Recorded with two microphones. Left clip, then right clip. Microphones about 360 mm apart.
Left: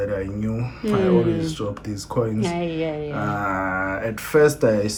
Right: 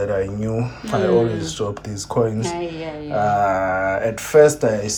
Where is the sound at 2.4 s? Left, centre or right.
Centre.